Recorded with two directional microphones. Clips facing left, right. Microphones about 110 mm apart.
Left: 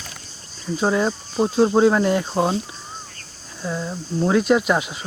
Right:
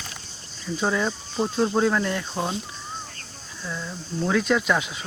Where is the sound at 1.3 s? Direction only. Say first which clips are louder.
Left 6 dB; 10° left (ahead or behind).